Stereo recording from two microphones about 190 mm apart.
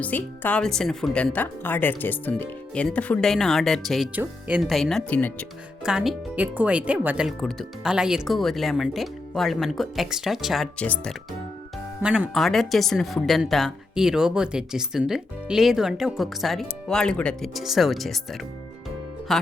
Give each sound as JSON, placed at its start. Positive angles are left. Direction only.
{"t": 0.0, "sound": "speech", "side_deg": 10}
{"t": 5.8, "sound": "speech", "side_deg": 0}
{"t": 12.0, "sound": "speech", "side_deg": -5}